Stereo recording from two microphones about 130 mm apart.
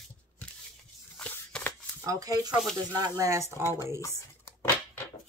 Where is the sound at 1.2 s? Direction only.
10° left (ahead or behind).